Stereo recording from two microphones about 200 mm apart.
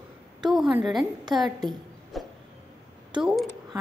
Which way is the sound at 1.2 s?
20° right (ahead or behind).